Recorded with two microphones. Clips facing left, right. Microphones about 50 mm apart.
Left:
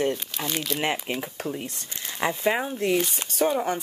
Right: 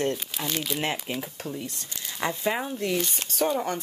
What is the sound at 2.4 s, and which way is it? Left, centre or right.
Speech, centre.